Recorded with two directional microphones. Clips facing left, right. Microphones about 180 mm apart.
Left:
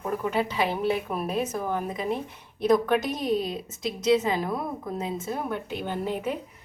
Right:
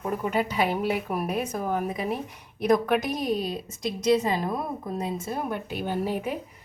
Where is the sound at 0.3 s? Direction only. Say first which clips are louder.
Right 2 dB; 10° right (ahead or behind).